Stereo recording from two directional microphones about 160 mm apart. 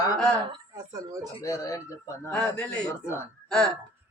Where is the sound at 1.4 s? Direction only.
20° left (ahead or behind).